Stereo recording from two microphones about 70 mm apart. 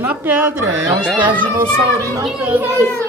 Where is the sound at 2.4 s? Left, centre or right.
Right.